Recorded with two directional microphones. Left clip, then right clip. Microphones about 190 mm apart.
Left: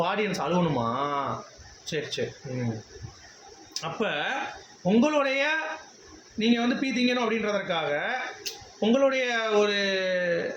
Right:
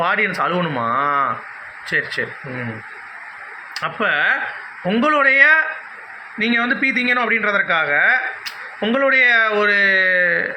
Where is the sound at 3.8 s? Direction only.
30° left (ahead or behind).